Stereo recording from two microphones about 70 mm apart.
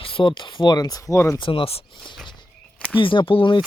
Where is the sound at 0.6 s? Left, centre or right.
Left.